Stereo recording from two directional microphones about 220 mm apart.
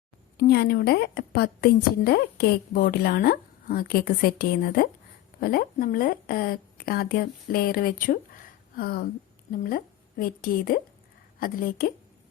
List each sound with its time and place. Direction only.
0.3 s a woman's voice: 45° left (ahead or behind)
8.7 s a sound: 45° left (ahead or behind)
9.5 s a woman's voice: 40° left (ahead or behind)